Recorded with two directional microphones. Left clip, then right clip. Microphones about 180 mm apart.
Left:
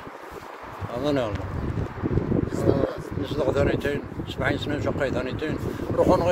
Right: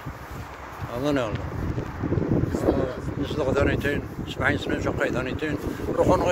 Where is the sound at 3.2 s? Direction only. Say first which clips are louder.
Even; centre (ahead or behind).